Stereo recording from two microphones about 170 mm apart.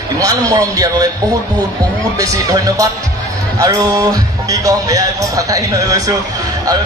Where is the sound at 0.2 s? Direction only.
20° right (ahead or behind).